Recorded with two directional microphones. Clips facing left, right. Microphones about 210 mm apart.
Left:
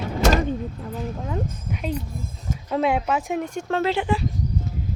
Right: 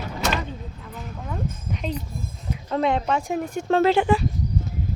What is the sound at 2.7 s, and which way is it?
Speech, 5° left (ahead or behind).